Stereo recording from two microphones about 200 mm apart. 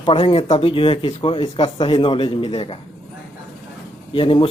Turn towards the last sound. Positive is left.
turn(degrees=25)  # may be behind; listen again after turning